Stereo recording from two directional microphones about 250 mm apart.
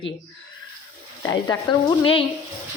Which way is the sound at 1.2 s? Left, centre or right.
Centre.